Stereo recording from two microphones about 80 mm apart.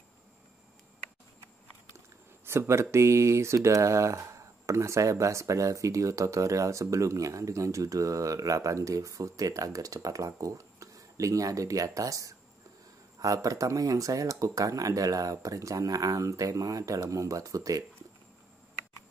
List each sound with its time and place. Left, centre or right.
2.4 s speech: right